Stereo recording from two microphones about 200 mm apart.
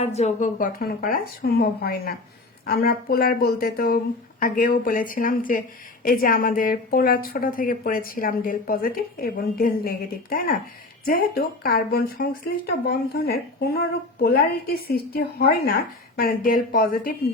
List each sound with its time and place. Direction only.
0.0 s a woman's voice: 35° left (ahead or behind)